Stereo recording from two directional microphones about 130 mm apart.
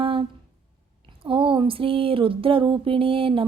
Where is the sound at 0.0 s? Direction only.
45° right (ahead or behind).